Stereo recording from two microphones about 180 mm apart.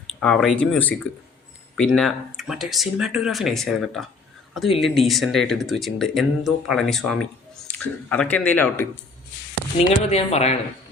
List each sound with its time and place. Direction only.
0.2 s speech: 5° left (ahead or behind)
10.1 s speech: 35° left (ahead or behind)